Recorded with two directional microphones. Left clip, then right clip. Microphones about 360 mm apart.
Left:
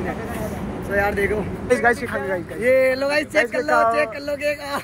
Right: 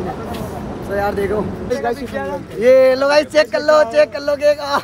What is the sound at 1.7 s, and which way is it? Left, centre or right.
Speech, left.